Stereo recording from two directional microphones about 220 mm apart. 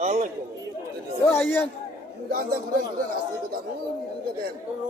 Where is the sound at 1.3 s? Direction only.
10° left (ahead or behind).